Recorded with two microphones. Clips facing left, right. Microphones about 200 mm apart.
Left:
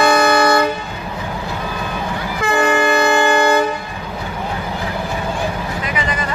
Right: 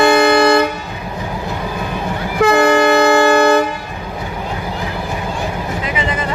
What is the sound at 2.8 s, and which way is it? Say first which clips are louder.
Wind instrument: right 4 dB; 70° right (ahead or behind).